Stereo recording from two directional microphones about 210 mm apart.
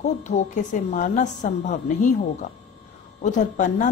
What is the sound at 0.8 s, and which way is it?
A woman's voice, 35° left (ahead or behind).